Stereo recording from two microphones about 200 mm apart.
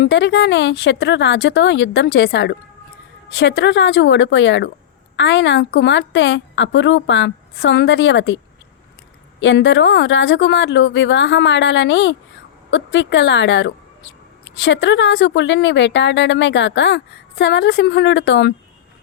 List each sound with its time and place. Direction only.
0.0 s a woman's voice: 60° left (ahead or behind)
9.4 s a woman's voice: 65° left (ahead or behind)